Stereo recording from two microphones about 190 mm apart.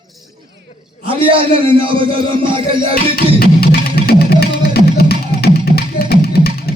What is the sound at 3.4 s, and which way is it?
Music, 55° left (ahead or behind).